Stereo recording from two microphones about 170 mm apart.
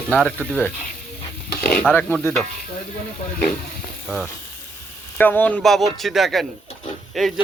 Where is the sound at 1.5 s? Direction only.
60° left (ahead or behind).